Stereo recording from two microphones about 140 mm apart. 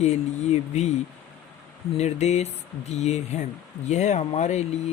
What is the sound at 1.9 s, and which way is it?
Speech, 50° left (ahead or behind).